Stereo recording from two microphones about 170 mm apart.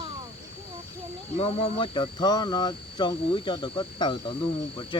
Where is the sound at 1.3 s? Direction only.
35° left (ahead or behind).